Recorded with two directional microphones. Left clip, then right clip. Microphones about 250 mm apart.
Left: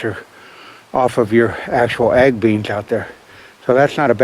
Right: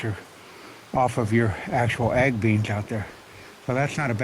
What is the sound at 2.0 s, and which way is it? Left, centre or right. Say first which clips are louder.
Speech: left 11 dB; right.